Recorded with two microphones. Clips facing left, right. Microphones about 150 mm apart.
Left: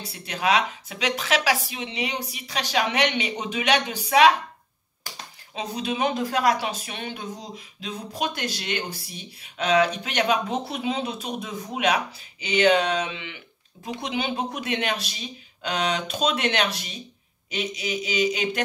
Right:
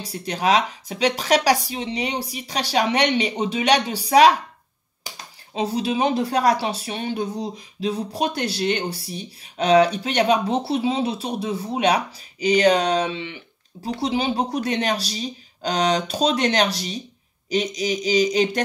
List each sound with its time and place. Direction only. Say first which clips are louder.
0.0 s speech: right 4 dB; 35° right (ahead or behind)